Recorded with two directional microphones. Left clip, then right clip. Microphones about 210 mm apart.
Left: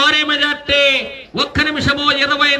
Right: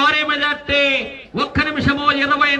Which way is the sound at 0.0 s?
50° left (ahead or behind).